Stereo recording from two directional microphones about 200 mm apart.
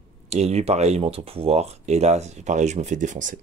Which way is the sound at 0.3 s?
35° right (ahead or behind).